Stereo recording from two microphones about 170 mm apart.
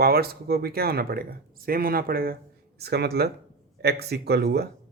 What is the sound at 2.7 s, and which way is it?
Speech, 70° right (ahead or behind).